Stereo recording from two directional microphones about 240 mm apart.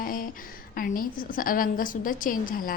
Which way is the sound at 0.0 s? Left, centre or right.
Left.